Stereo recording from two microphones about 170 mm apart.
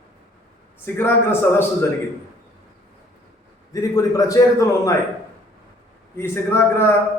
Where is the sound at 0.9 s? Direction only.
15° left (ahead or behind).